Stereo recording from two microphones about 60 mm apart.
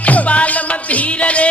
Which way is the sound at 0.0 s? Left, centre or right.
Left.